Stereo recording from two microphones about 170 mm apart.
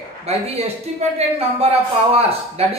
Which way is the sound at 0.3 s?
35° right (ahead or behind).